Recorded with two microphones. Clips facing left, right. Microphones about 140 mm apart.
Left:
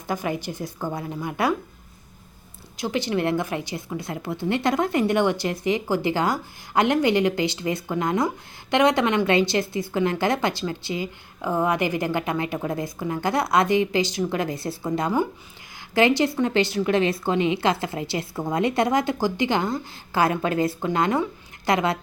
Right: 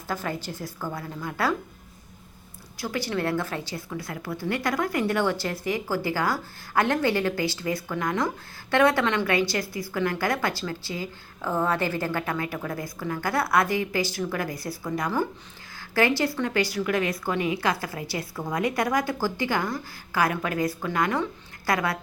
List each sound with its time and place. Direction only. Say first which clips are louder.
0.1 s a woman's voice: left 4 dB; 15° left (ahead or behind)
2.7 s a woman's voice: left 4 dB; 20° left (ahead or behind)